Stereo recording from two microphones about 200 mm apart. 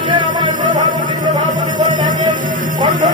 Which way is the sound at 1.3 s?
40° right (ahead or behind).